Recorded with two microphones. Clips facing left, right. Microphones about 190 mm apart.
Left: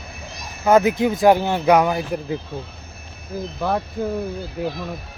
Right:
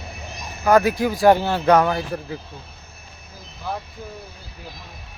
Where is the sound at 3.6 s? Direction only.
80° left.